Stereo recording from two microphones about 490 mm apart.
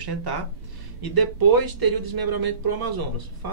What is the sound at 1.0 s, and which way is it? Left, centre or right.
Speech, right.